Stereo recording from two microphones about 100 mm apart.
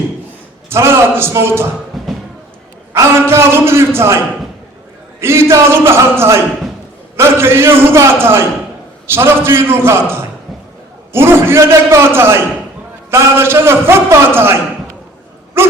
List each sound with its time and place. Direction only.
0.7 s a man's voice: 25° right (ahead or behind)
1.9 s a sound: centre (ahead or behind)
2.9 s a man's voice: 25° right (ahead or behind)
5.2 s a man's voice: 25° right (ahead or behind)
15.6 s dog: 25° right (ahead or behind)